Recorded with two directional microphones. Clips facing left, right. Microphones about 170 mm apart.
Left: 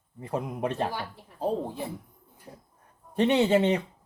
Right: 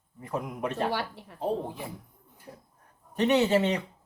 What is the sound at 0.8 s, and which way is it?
Speech, 70° right (ahead or behind).